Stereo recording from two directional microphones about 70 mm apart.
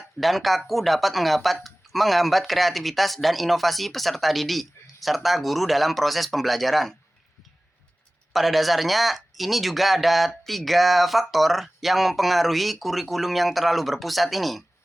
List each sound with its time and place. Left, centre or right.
0.2 s speech: centre
8.3 s speech: centre